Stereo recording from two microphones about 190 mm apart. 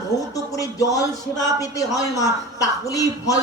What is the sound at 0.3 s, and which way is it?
Speech, 20° left (ahead or behind).